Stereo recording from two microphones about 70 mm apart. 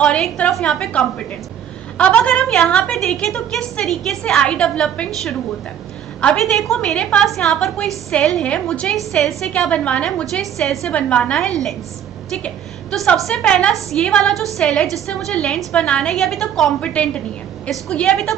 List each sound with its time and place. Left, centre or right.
0.0 s a woman's voice: centre
4.4 s a woman's voice: centre
6.3 s a woman's voice: centre
9.5 s a woman's voice: centre
10.4 s a woman's voice: centre
10.9 s a woman's voice: centre
12.9 s a woman's voice: centre
16.8 s a woman's voice: centre